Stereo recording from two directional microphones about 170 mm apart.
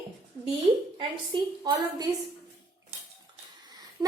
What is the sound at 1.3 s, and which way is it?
Speech, 25° right (ahead or behind).